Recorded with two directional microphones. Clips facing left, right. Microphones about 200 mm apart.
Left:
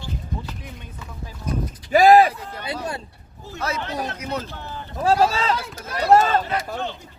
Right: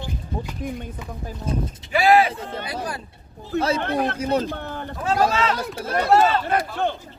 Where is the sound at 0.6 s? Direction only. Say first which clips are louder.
Right 11 dB; 50° right (ahead or behind).